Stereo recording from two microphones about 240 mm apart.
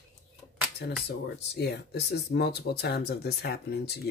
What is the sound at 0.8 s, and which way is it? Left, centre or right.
Speech, left.